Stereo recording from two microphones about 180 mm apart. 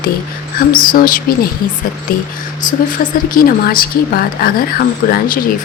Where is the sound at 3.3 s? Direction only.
55° left (ahead or behind).